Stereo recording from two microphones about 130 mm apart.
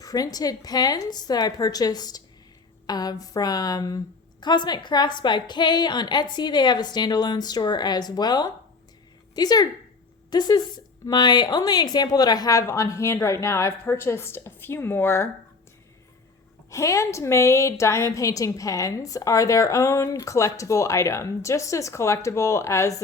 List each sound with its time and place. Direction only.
0.0 s a woman's voice: 30° left (ahead or behind)
16.6 s a woman's voice: 25° left (ahead or behind)